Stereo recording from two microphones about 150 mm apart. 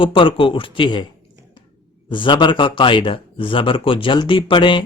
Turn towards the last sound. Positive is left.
turn(degrees=35)  # may be behind; listen again after turning